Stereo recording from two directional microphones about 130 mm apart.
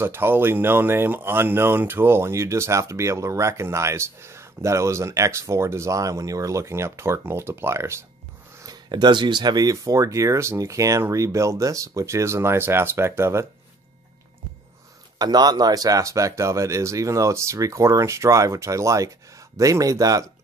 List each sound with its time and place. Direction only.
0.0 s speech: 20° right (ahead or behind)
8.6 s speech: 35° right (ahead or behind); by 13.5 s 20° right (ahead or behind)
15.1 s speech: 30° right (ahead or behind)